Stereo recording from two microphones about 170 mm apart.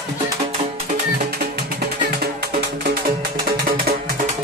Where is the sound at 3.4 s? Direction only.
60° right (ahead or behind).